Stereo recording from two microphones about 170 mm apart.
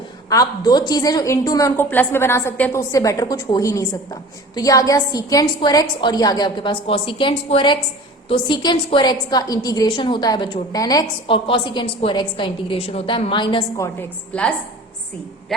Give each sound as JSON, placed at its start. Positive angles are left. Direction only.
{"t": 0.3, "sound": "a woman's voice", "side_deg": 20}
{"t": 14.3, "sound": "a woman's voice", "side_deg": 5}